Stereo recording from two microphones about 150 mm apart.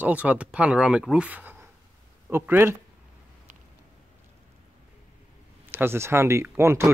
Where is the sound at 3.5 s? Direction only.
60° right (ahead or behind).